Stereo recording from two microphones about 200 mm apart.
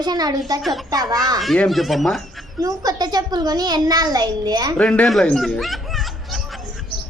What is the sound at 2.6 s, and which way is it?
A child's voice, 20° right (ahead or behind).